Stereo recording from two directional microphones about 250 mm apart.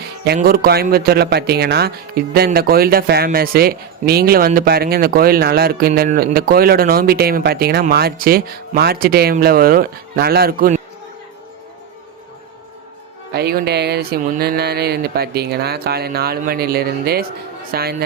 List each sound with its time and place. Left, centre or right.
0.3 s speech: right
13.3 s speech: right